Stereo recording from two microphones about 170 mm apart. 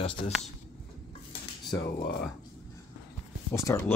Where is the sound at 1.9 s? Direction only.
55° left (ahead or behind).